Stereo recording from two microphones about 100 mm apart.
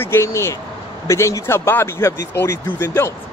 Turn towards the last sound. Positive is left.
turn(degrees=25)  # may be behind; listen again after turning